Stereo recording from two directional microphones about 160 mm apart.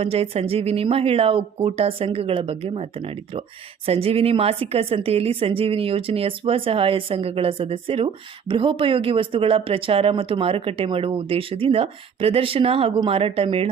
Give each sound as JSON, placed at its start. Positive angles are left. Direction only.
{"t": 0.0, "sound": "speech", "side_deg": -40}